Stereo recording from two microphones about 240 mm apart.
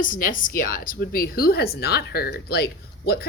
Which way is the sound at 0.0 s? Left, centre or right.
Left.